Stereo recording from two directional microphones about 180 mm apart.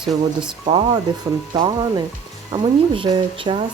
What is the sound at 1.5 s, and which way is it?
Speech, 25° right (ahead or behind).